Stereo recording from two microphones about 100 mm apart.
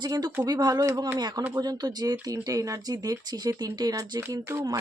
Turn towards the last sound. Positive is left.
turn(degrees=-30)  # may be behind; listen again after turning